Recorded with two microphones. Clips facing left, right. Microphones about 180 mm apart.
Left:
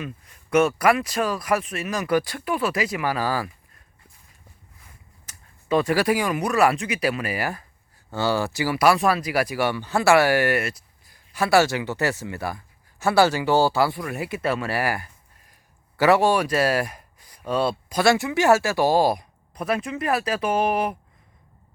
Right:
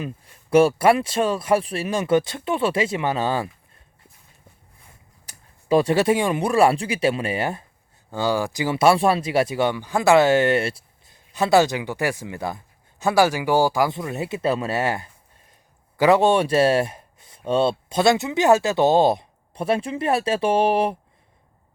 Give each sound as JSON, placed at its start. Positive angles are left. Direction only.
{"t": 0.0, "sound": "speech", "side_deg": -30}
{"t": 5.2, "sound": "speech", "side_deg": -35}
{"t": 8.1, "sound": "speech", "side_deg": -15}